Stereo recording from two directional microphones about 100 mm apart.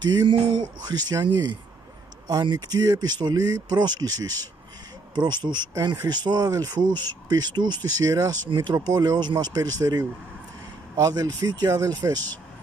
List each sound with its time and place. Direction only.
0.0 s speech: 45° right (ahead or behind)